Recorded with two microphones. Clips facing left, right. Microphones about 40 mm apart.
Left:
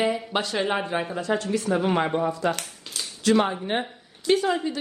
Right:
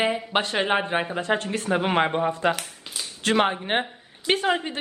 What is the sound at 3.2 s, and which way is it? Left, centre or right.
A woman's voice, right.